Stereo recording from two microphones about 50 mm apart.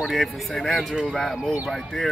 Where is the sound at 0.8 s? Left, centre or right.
Centre.